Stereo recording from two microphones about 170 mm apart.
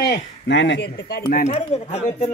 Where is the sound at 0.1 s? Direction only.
90° left; by 1.4 s 65° left (ahead or behind).